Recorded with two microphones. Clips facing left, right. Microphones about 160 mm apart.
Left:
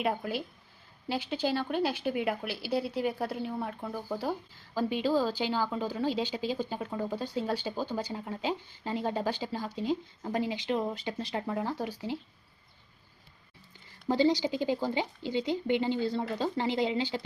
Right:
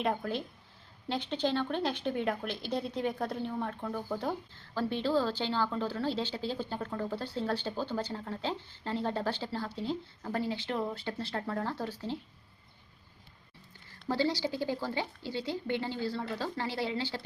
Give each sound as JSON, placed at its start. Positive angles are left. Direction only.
{"t": 0.0, "sound": "speech", "side_deg": 5}
{"t": 14.1, "sound": "speech", "side_deg": 20}